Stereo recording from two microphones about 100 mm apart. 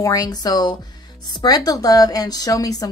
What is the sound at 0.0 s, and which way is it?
Speech, 35° left (ahead or behind).